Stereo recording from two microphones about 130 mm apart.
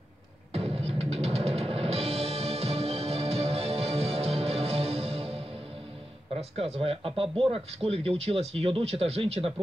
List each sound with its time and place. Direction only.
0.5 s music: 50° right (ahead or behind)
6.5 s speech: 50° right (ahead or behind)